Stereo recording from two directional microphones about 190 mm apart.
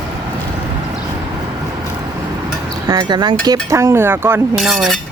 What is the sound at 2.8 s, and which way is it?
Speech, 20° right (ahead or behind).